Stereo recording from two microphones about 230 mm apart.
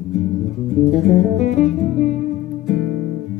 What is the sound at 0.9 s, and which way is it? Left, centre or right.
Music, left.